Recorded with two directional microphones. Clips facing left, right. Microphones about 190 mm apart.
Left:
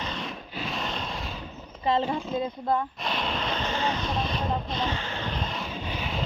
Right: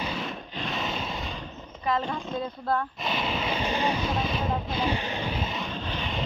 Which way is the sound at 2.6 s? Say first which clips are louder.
Left 1 dB; 15° left (ahead or behind).